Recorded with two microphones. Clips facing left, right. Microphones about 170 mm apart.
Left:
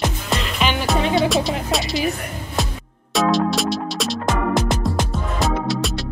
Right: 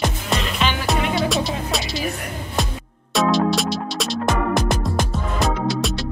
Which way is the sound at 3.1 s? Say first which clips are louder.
Even; centre (ahead or behind).